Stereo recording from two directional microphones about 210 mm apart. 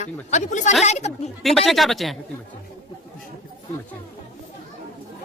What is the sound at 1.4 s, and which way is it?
Speech, centre (ahead or behind).